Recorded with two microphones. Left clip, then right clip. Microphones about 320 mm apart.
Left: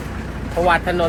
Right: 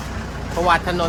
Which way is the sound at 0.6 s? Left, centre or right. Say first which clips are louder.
Left 1 dB; centre.